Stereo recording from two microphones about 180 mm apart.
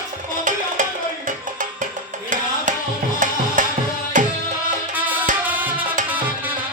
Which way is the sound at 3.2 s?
45° right (ahead or behind).